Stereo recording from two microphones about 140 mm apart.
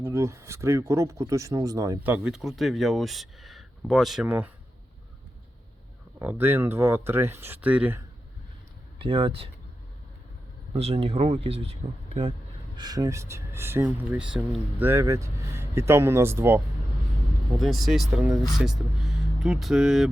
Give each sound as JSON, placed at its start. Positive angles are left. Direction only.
{"t": 0.0, "sound": "speech", "side_deg": -20}
{"t": 2.0, "sound": "speech", "side_deg": -10}
{"t": 4.3, "sound": "speech", "side_deg": -10}
{"t": 6.1, "sound": "speech", "side_deg": -15}
{"t": 9.0, "sound": "speech", "side_deg": -40}
{"t": 10.8, "sound": "speech", "side_deg": -45}
{"t": 12.7, "sound": "speech", "side_deg": -30}
{"t": 14.8, "sound": "speech", "side_deg": -20}
{"t": 17.6, "sound": "speech", "side_deg": 0}